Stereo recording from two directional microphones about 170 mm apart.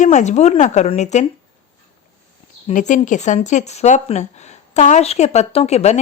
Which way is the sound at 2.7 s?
45° left (ahead or behind).